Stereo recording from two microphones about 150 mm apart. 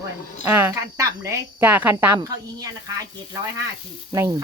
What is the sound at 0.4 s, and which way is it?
Speech, 15° right (ahead or behind).